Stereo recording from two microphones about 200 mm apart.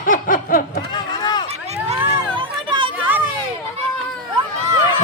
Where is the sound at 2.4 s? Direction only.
25° right (ahead or behind).